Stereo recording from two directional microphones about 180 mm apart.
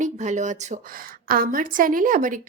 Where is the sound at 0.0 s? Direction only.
40° right (ahead or behind).